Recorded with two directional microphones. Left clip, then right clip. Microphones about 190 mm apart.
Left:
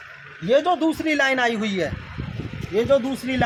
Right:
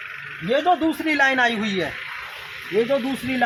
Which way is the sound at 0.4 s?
25° left (ahead or behind).